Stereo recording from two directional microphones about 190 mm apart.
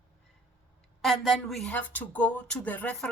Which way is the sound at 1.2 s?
Centre (ahead or behind).